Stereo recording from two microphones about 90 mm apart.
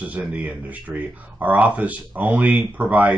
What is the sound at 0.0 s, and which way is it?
Speech, 15° right (ahead or behind).